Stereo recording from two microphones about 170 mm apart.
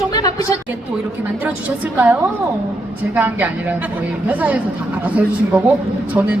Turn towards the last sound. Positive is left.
turn(degrees=-10)  # may be behind; listen again after turning